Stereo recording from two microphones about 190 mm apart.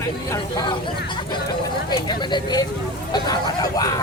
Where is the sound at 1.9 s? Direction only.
20° left (ahead or behind).